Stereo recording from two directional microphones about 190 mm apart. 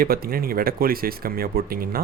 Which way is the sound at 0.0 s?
50° right (ahead or behind).